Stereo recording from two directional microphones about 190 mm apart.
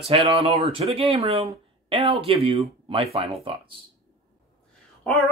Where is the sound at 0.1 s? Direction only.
30° right (ahead or behind).